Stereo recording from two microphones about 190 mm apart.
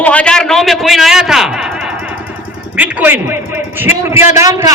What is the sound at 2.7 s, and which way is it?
A woman's voice, 10° right (ahead or behind).